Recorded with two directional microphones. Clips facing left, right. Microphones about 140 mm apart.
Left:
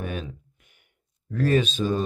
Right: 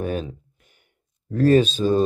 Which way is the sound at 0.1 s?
35° right (ahead or behind).